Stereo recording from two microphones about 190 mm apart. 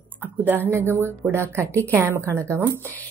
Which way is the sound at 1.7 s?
10° left (ahead or behind).